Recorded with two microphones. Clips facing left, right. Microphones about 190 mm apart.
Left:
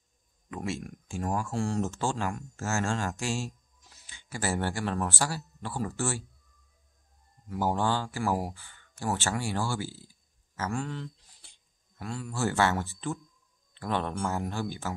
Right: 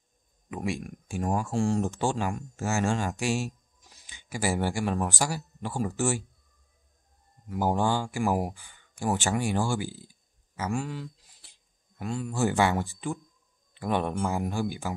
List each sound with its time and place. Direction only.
0.5 s speech: 15° right (ahead or behind)
7.4 s speech: 15° right (ahead or behind)
12.0 s speech: 20° right (ahead or behind)